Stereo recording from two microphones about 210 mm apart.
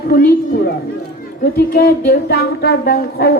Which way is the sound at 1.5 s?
50° left (ahead or behind).